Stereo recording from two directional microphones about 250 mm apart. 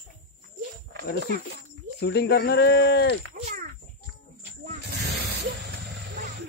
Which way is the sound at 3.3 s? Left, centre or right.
Right.